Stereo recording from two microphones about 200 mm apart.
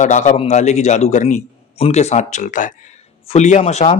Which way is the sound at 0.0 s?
40° left (ahead or behind).